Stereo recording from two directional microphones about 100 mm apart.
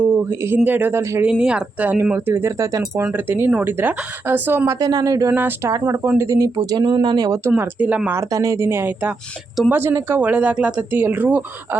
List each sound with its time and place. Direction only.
0.3 s speech: 20° right (ahead or behind)
1.2 s speech: 10° right (ahead or behind); by 3.0 s 30° right (ahead or behind)
3.0 s speech: 20° right (ahead or behind); by 5.3 s 35° right (ahead or behind)
5.3 s speech: 20° right (ahead or behind); by 7.3 s 50° right (ahead or behind)
7.3 s speech: 35° right (ahead or behind)
7.5 s speech: 15° right (ahead or behind)
8.1 s speech: 35° right (ahead or behind)